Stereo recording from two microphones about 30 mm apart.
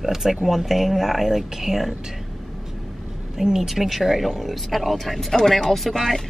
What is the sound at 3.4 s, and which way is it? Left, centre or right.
Speech, centre.